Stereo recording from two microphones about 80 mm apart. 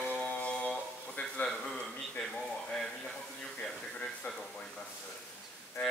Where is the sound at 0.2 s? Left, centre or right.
Centre.